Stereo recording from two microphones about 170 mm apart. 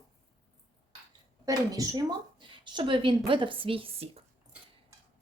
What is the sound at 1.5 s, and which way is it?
A woman's voice, 20° right (ahead or behind).